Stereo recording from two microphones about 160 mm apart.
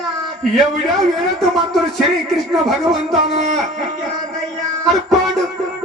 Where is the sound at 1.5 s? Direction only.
Centre (ahead or behind).